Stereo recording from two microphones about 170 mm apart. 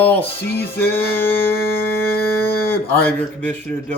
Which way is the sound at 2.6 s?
10° left (ahead or behind).